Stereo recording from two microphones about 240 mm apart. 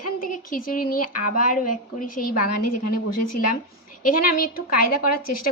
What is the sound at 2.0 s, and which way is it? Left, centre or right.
Speech, left.